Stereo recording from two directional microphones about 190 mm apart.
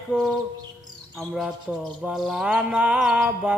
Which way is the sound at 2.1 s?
5° right (ahead or behind).